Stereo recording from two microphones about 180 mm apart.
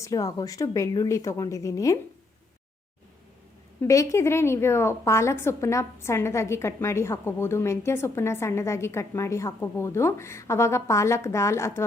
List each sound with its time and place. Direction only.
0.0 s a woman's voice: 20° left (ahead or behind)
3.8 s a woman's voice: 15° left (ahead or behind)